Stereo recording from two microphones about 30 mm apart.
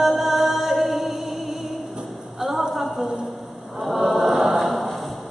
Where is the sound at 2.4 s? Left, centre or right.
Centre.